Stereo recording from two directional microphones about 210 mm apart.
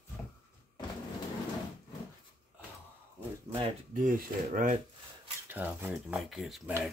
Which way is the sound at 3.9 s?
40° right (ahead or behind).